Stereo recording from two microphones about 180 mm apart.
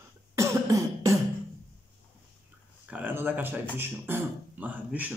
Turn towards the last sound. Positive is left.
turn(degrees=-10)  # may be behind; listen again after turning